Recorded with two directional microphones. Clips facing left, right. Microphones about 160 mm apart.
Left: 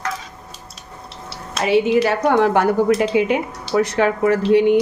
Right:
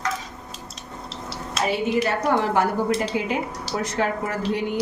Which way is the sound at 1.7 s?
80° left.